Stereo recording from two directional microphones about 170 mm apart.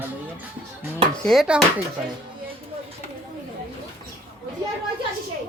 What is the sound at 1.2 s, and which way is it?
Speech, centre (ahead or behind).